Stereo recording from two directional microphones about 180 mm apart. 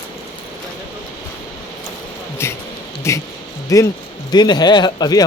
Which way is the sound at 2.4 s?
15° left (ahead or behind).